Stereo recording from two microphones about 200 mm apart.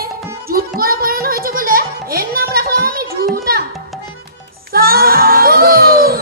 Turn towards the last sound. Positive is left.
turn(degrees=-50)  # may be behind; listen again after turning